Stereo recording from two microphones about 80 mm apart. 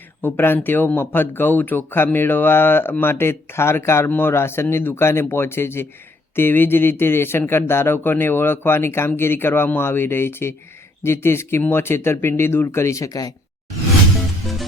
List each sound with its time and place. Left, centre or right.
0.2 s speech: left